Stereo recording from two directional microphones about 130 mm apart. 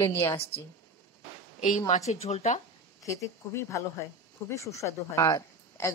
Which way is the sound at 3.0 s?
25° left (ahead or behind).